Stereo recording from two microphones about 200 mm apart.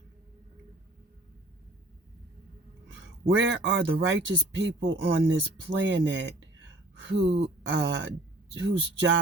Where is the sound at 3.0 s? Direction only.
65° right (ahead or behind).